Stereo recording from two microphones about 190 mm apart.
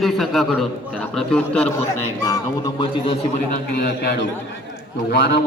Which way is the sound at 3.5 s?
60° left (ahead or behind).